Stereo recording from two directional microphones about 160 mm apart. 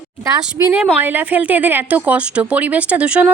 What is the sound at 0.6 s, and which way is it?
A woman's voice, 10° right (ahead or behind).